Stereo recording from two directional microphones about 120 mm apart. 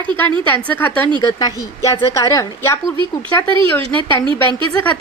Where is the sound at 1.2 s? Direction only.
30° left (ahead or behind).